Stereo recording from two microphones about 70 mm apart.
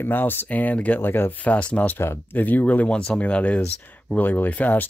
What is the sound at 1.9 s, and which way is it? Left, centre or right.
Speech, left.